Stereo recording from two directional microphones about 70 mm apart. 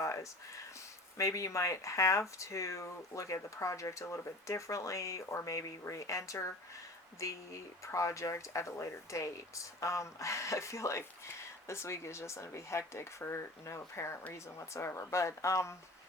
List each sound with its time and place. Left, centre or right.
0.0 s speech: left